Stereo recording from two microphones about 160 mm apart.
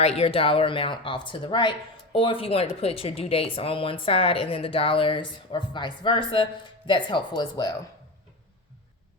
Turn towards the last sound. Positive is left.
turn(degrees=25)  # may be behind; listen again after turning